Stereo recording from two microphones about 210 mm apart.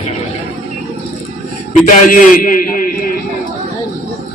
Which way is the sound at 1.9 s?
40° left (ahead or behind).